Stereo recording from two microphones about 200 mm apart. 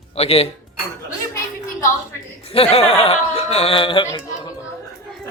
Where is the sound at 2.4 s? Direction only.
30° left (ahead or behind).